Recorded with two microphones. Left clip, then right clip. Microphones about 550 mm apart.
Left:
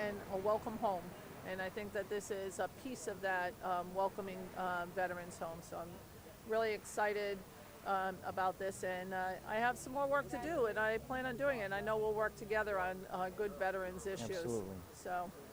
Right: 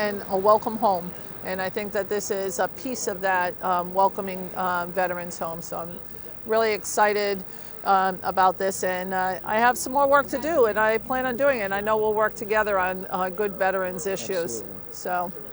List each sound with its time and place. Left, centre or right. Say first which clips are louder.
0.0 s speech: right 16 dB; right